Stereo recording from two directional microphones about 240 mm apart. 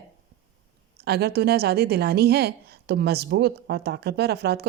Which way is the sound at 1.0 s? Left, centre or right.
Right.